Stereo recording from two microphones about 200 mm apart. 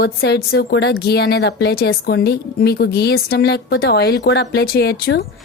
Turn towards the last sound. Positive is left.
turn(degrees=55)  # may be behind; listen again after turning